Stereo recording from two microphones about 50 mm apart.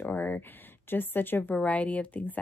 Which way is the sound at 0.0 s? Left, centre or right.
Left.